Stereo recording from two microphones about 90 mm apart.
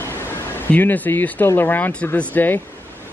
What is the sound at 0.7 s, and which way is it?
Speech, 25° left (ahead or behind).